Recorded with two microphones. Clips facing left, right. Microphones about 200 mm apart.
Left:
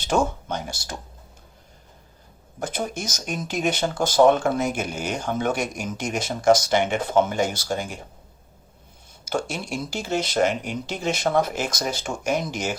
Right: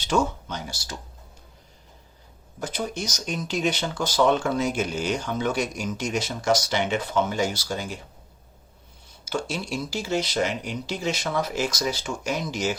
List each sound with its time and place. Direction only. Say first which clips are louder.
0.0 s speech: left 1 dB; 50° left (ahead or behind)
2.6 s speech: left 1 dB; 50° left (ahead or behind)
9.2 s speech: left 2 dB; 50° left (ahead or behind)